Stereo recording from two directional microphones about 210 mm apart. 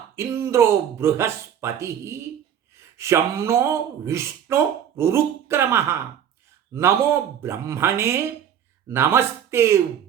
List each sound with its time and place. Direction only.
0.2 s speech: 10° right (ahead or behind)